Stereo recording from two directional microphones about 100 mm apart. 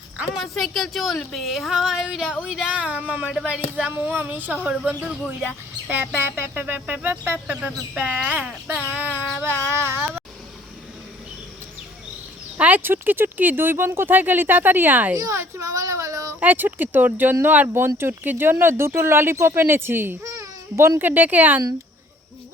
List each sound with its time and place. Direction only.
0.3 s speech: centre (ahead or behind); by 7.3 s 20° right (ahead or behind)
7.9 s child singing: 15° right (ahead or behind)
12.5 s speech: 15° right (ahead or behind)
15.1 s a child's voice: 30° right (ahead or behind)
16.4 s speech: 15° right (ahead or behind)